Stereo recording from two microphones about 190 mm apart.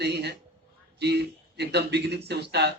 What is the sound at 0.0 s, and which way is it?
A man's voice, 60° right (ahead or behind).